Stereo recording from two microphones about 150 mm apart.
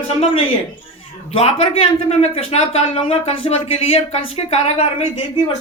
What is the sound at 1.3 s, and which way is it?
Speech, 40° left (ahead or behind).